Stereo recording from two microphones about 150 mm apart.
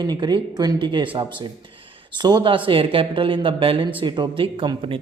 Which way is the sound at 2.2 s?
30° right (ahead or behind).